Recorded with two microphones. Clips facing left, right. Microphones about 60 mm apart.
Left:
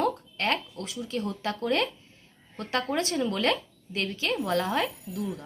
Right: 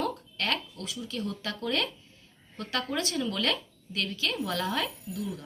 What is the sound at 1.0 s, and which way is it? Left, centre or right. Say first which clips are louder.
A woman's voice: left 4 dB; left.